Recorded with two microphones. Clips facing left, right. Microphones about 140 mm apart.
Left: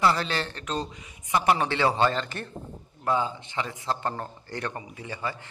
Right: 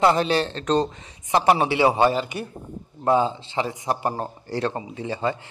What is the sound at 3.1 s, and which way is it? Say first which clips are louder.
A man's voice: right 6 dB; 25° right (ahead or behind).